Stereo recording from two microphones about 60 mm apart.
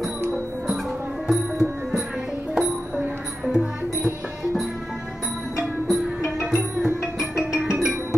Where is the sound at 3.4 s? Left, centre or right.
Centre.